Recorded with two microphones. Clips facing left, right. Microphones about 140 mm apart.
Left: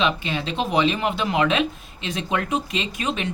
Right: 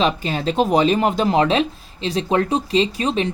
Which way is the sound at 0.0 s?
40° right (ahead or behind).